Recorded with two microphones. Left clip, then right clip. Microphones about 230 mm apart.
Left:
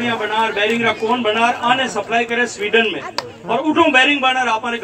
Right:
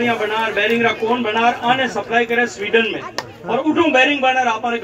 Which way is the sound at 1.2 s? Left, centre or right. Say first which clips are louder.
Left 1 dB; left.